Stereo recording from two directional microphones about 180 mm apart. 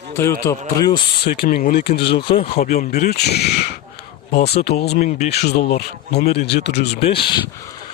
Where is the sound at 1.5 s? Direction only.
55° left (ahead or behind).